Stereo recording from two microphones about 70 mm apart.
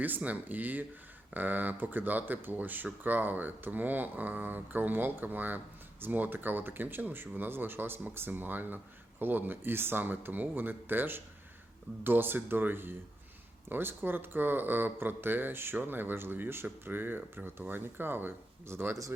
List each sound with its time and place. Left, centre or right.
0.0 s speech: right